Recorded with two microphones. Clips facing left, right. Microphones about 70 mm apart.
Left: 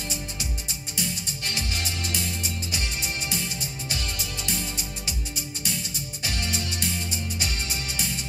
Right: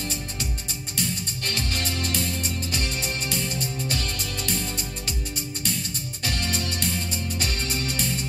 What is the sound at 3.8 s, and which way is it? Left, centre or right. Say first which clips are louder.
Music: right 3 dB; right.